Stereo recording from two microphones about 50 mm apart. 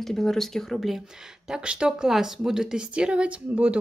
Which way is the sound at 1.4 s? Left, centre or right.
Centre.